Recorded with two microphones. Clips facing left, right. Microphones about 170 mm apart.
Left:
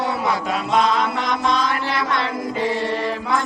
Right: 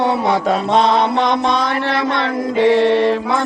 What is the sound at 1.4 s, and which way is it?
Mantra, 65° right (ahead or behind).